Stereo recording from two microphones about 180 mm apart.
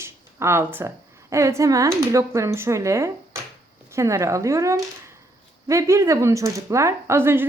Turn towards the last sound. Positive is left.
turn(degrees=-15)  # may be behind; listen again after turning